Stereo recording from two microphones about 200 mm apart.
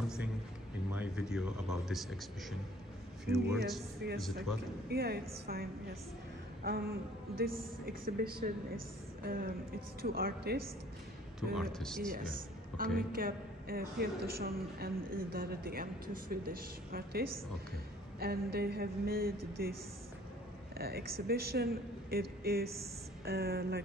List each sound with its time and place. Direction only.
0.9 s speech: 5° right (ahead or behind)
4.0 s a man's voice: 55° right (ahead or behind)
11.5 s speech: centre (ahead or behind)
12.1 s a woman's voice: 45° right (ahead or behind)
20.7 s a man's voice: 50° right (ahead or behind)